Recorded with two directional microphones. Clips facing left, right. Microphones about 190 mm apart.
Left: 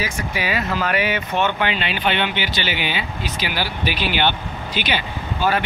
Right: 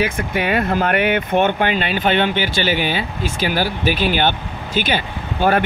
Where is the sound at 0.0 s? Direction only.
55° right (ahead or behind).